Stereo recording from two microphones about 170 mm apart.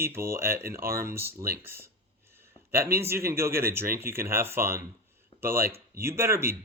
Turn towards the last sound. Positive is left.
turn(degrees=-15)  # may be behind; listen again after turning